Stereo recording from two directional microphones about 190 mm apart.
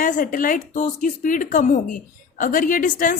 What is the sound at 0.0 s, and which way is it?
A woman's voice, 45° left (ahead or behind).